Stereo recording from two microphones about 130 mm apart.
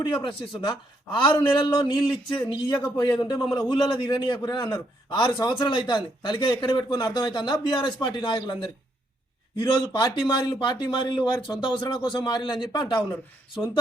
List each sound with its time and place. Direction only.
0.0 s a man's voice: 35° left (ahead or behind)